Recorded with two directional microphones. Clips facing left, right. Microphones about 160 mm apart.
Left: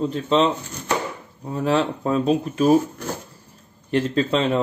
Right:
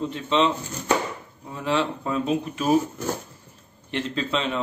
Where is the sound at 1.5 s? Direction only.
40° left (ahead or behind).